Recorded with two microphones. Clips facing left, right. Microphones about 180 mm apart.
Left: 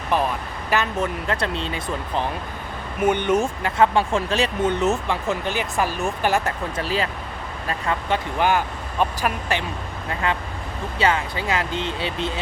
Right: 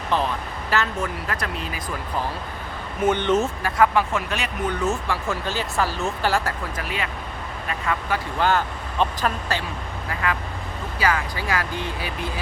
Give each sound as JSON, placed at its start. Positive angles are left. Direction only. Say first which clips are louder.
{"t": 0.7, "sound": "speech", "louder": "left 2 dB", "side_deg": 20}
{"t": 3.0, "sound": "speech", "louder": "left 1 dB", "side_deg": 15}
{"t": 3.8, "sound": "speech", "louder": "left 1 dB", "side_deg": 30}
{"t": 8.4, "sound": "speech", "louder": "right 1 dB", "side_deg": 15}
{"t": 10.1, "sound": "speech", "louder": "left 2 dB", "side_deg": 25}